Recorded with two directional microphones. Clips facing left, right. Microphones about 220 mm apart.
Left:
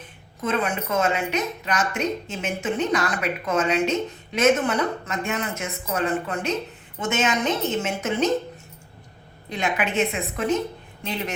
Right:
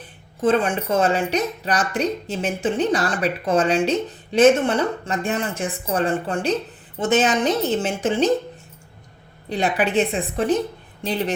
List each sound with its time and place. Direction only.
0.4 s speech: 30° right (ahead or behind)
9.5 s speech: 35° right (ahead or behind)